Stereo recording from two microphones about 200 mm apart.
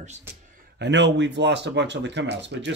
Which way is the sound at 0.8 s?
60° right (ahead or behind).